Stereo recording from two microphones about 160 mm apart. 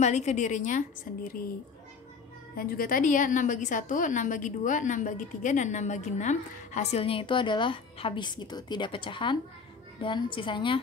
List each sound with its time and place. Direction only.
0.0 s a woman's voice: 45° left (ahead or behind)
2.5 s a woman's voice: 65° left (ahead or behind); by 10.8 s 30° left (ahead or behind)